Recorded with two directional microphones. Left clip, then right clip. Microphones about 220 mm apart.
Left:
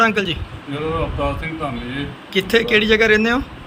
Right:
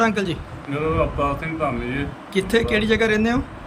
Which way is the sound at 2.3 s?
10° right (ahead or behind).